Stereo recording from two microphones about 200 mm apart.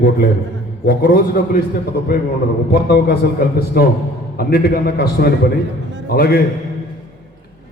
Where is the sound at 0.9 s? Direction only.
45° left (ahead or behind).